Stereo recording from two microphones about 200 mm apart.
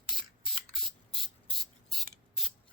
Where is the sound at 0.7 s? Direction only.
Centre (ahead or behind).